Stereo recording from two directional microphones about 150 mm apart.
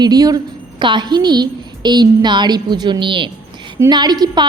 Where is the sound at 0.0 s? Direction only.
25° right (ahead or behind).